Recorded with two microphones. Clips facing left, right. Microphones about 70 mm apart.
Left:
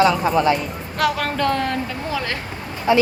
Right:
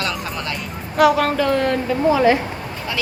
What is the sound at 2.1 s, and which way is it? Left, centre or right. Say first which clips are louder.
Speech: right 10 dB; centre.